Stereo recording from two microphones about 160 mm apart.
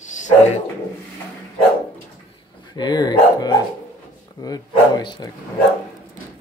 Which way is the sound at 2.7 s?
25° left (ahead or behind).